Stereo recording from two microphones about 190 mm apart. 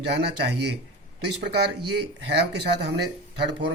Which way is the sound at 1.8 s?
60° right (ahead or behind).